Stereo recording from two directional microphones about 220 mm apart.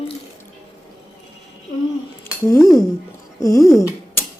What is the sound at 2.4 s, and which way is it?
Speech, 15° left (ahead or behind).